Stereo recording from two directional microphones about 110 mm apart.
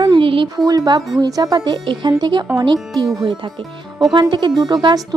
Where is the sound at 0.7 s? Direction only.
40° right (ahead or behind).